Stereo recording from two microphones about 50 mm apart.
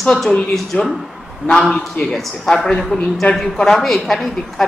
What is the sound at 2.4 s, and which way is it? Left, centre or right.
A man's voice, centre.